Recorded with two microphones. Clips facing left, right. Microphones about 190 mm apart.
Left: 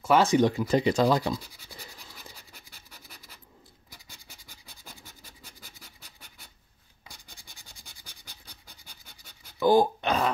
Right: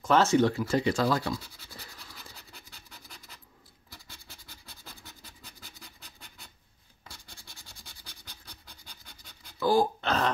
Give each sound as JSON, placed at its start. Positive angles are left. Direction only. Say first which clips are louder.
{"t": 0.0, "sound": "scratch", "louder": "left 1 dB", "side_deg": 10}
{"t": 7.1, "sound": "scratch", "louder": "right 1 dB", "side_deg": 15}
{"t": 9.6, "sound": "speech", "louder": "left 4 dB", "side_deg": 20}